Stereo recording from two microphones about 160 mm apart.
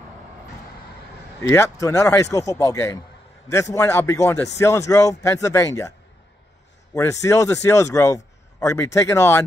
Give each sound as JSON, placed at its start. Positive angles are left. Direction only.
{"t": 1.4, "sound": "a man's voice", "side_deg": 20}
{"t": 6.9, "sound": "a man's voice", "side_deg": 20}